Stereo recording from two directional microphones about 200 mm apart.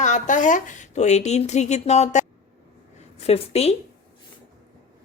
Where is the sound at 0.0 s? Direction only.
40° left (ahead or behind).